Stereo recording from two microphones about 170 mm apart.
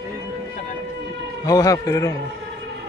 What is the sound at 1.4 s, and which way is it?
Speech, 20° left (ahead or behind).